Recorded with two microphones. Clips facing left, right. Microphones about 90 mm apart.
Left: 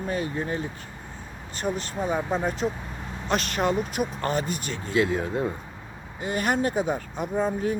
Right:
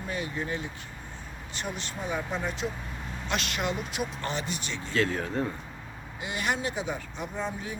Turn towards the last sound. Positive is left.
turn(degrees=45)  # may be behind; listen again after turning